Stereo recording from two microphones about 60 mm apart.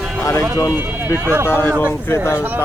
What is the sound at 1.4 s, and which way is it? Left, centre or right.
Speech, left.